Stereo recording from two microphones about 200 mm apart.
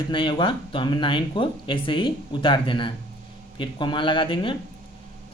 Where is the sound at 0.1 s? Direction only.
25° left (ahead or behind).